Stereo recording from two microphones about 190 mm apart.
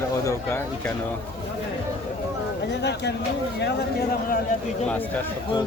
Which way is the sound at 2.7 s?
65° left (ahead or behind).